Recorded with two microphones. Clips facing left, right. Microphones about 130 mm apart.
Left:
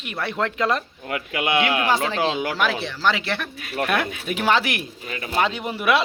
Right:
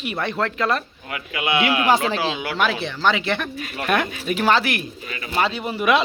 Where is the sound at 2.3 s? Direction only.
40° left (ahead or behind).